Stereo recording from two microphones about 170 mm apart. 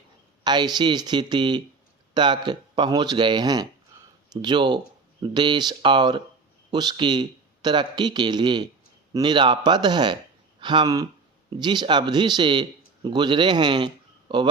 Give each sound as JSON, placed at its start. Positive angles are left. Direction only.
{"t": 0.4, "sound": "a man's voice", "side_deg": -25}